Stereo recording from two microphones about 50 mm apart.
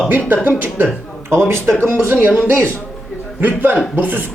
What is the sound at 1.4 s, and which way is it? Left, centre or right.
Speech, right.